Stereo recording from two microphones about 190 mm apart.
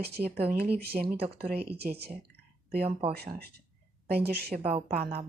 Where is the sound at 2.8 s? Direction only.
30° right (ahead or behind).